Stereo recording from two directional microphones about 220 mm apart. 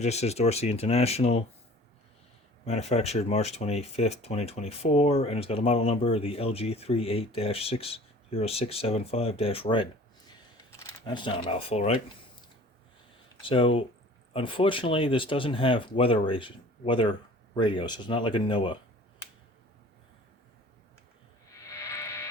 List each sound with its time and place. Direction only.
0.0 s speech: 30° left (ahead or behind)
2.6 s speech: 30° left (ahead or behind)
13.4 s speech: 25° left (ahead or behind)
21.5 s a sound: 15° left (ahead or behind)